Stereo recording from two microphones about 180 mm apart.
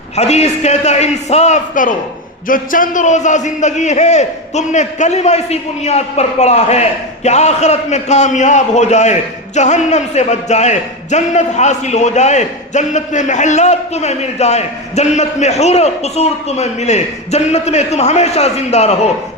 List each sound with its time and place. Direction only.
0.2 s a man's voice: 35° left (ahead or behind)